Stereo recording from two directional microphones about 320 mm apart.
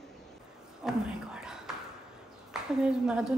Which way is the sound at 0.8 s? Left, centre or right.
Centre.